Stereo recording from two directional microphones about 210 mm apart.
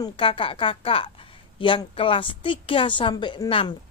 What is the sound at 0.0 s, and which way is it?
A woman's voice, 25° left (ahead or behind).